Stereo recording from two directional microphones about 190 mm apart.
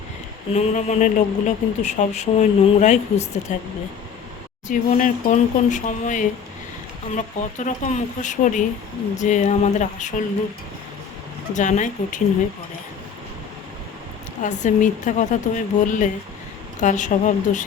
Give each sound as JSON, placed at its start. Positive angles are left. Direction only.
{"t": 0.5, "sound": "speech", "side_deg": 40}
{"t": 4.7, "sound": "speech", "side_deg": 45}
{"t": 11.5, "sound": "speech", "side_deg": 40}
{"t": 14.4, "sound": "speech", "side_deg": 40}